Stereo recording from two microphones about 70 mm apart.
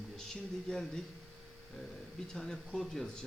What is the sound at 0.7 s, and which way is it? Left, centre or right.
Speech, centre.